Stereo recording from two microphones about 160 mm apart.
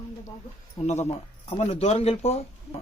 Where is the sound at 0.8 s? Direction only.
45° left (ahead or behind).